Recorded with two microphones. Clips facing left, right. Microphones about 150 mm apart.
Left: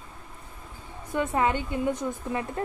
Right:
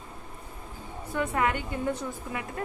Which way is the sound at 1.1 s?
25° left (ahead or behind).